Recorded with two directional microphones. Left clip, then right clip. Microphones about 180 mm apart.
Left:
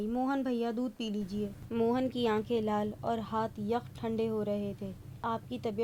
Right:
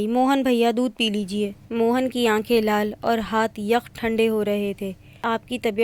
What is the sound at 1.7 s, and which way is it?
Speech, 25° right (ahead or behind).